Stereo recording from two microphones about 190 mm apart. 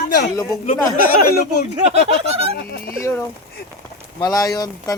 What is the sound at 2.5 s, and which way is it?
Speech, 55° left (ahead or behind).